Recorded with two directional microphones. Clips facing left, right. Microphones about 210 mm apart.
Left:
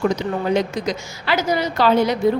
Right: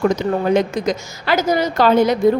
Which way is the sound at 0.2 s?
50° right (ahead or behind).